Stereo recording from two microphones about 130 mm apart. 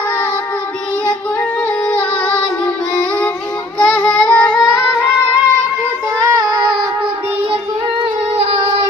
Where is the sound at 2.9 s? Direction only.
15° left (ahead or behind).